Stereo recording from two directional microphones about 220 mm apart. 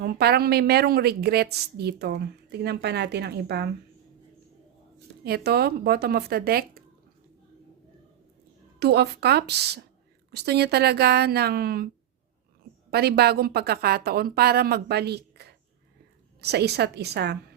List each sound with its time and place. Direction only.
0.0 s a woman's voice: 45° right (ahead or behind)
5.2 s a woman's voice: 45° right (ahead or behind)
8.8 s a woman's voice: 50° right (ahead or behind)
12.9 s a woman's voice: 45° right (ahead or behind)